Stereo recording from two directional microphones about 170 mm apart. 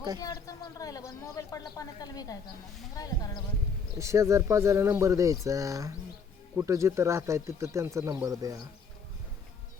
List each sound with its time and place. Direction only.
0.2 s speech: 20° left (ahead or behind)
3.9 s speech: 15° right (ahead or behind)